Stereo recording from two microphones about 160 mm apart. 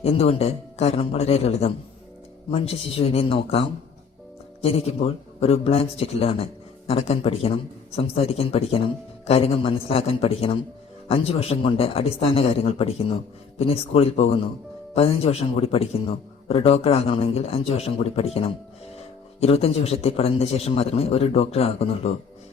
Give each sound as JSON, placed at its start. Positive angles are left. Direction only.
{"t": 0.0, "sound": "speech", "side_deg": 40}